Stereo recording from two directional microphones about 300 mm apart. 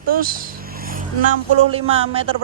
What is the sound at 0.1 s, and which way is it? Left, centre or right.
Vehicle, right.